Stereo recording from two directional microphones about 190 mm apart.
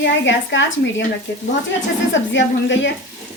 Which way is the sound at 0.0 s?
75° left (ahead or behind).